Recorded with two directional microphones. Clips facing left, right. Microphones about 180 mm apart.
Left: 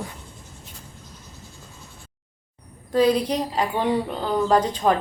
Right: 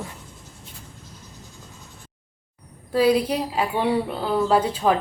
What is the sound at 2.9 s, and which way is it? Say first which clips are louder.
A woman's voice: even; 5° right (ahead or behind).